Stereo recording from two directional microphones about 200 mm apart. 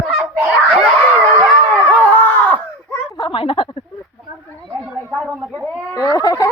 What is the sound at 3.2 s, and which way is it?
Speech, 25° left (ahead or behind).